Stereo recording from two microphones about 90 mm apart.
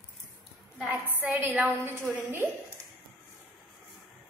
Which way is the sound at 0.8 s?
20° right (ahead or behind).